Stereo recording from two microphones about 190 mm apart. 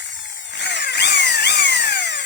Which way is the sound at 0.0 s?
65° left (ahead or behind).